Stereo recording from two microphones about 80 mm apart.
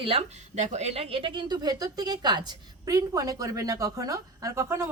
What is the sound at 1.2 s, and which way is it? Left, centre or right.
A woman's voice, right.